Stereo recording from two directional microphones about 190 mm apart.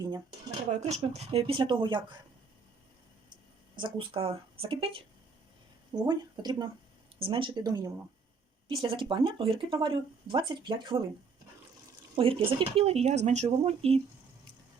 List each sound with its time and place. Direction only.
0.7 s speech: 35° right (ahead or behind)
3.8 s speech: 25° right (ahead or behind)
6.1 s speech: 20° right (ahead or behind)
12.1 s speech: 30° right (ahead or behind)